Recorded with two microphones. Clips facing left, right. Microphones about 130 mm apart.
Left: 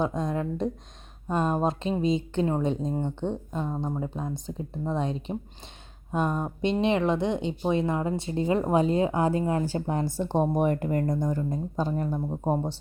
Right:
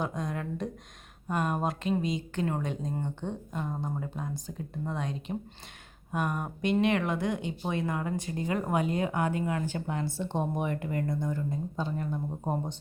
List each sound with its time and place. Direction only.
0.0 s a woman's voice: 25° left (ahead or behind)